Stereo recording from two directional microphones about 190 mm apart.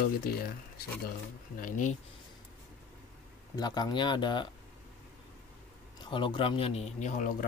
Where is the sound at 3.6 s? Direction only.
20° left (ahead or behind).